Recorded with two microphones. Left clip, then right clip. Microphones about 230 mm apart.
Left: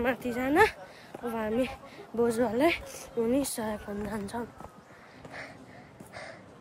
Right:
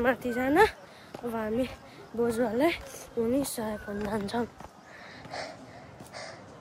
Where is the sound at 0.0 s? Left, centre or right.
Centre.